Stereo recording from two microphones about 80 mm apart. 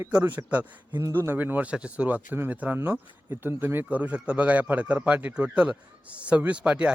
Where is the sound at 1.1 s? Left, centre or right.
Right.